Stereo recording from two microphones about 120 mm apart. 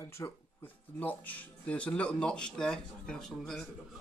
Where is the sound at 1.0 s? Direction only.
15° left (ahead or behind).